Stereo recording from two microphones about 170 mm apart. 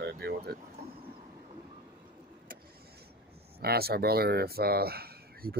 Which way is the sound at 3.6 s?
65° right (ahead or behind).